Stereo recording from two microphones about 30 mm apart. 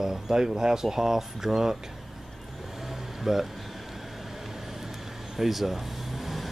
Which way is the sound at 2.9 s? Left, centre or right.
Centre.